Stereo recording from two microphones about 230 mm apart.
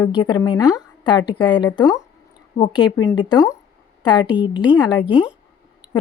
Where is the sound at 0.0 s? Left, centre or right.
Centre.